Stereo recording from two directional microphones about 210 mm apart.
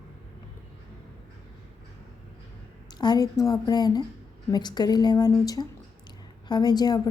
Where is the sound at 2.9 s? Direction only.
20° left (ahead or behind).